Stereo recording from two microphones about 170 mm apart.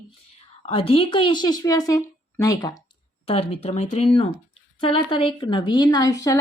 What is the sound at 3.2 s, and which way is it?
A woman's voice, 35° left (ahead or behind).